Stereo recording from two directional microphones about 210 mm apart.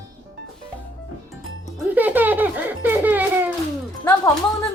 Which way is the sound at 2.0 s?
10° right (ahead or behind).